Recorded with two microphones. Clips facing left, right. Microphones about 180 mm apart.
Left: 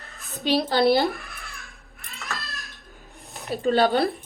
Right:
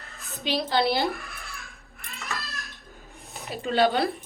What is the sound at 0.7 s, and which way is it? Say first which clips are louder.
Speech: left 4 dB; 45° left (ahead or behind).